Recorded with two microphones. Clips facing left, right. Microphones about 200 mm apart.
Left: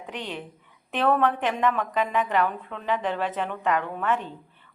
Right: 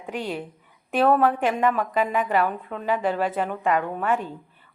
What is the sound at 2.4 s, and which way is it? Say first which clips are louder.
Speech: right 2 dB; 40° right (ahead or behind).